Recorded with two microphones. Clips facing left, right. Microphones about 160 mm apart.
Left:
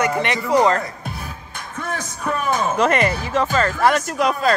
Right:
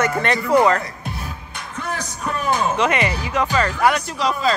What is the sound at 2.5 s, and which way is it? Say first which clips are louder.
Speech: left 1 dB; 45° left (ahead or behind).